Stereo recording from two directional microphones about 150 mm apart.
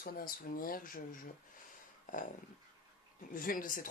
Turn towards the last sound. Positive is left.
turn(degrees=65)  # may be behind; listen again after turning